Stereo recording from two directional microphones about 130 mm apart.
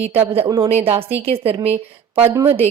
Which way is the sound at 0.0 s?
50° right (ahead or behind).